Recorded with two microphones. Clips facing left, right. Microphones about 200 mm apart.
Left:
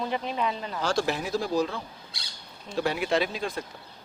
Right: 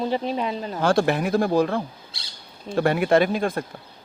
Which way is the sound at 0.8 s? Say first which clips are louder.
Right 7 dB; 55° right (ahead or behind).